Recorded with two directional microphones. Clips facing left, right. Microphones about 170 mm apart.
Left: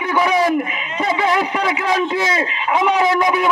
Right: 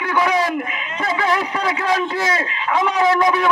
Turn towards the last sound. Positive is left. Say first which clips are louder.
# even
turn(degrees=10)  # may be behind; listen again after turning